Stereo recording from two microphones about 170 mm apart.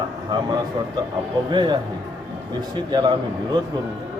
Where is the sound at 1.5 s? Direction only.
25° right (ahead or behind).